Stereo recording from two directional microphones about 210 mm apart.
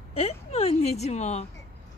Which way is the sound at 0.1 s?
30° left (ahead or behind).